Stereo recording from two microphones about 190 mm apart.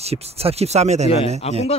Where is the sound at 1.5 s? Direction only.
30° left (ahead or behind).